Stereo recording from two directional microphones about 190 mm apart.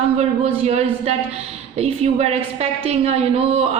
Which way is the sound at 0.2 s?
35° right (ahead or behind).